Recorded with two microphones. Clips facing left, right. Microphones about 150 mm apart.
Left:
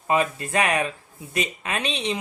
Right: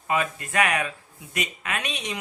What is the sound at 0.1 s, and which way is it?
Speech, 30° left (ahead or behind).